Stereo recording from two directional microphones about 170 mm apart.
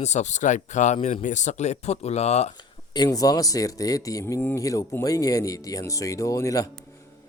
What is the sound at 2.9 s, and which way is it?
Speech, 25° left (ahead or behind).